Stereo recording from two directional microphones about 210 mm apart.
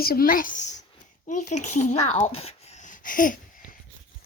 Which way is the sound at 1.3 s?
35° left (ahead or behind).